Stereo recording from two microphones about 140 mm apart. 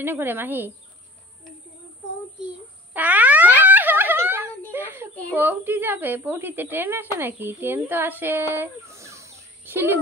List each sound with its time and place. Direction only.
0.0 s speech: 15° right (ahead or behind)
2.9 s a sound: 10° right (ahead or behind)
5.3 s speech: 15° right (ahead or behind)